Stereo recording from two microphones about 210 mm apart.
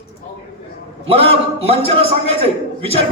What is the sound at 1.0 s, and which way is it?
Music, 25° right (ahead or behind).